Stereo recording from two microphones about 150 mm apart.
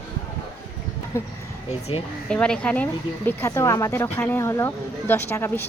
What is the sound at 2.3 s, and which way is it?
Speech, 5° left (ahead or behind).